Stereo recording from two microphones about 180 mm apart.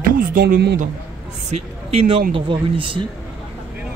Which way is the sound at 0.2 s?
50° right (ahead or behind).